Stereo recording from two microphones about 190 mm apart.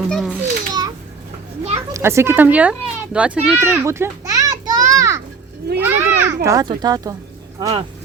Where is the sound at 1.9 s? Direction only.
15° right (ahead or behind).